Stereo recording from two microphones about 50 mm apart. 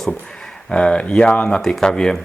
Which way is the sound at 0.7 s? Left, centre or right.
Left.